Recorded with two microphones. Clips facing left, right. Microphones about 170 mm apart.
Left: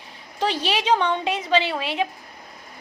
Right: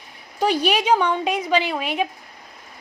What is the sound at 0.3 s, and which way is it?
A woman's voice, 10° right (ahead or behind).